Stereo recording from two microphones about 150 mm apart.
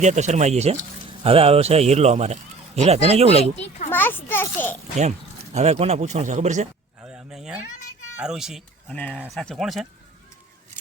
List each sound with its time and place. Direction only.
0.0 s a man's voice: 50° right (ahead or behind)
3.3 s speech: 45° left (ahead or behind)
3.8 s a child's voice: 15° left (ahead or behind)
5.5 s a man's voice: 45° right (ahead or behind)
7.0 s a sound: 5° right (ahead or behind)
8.2 s speech: 5° right (ahead or behind)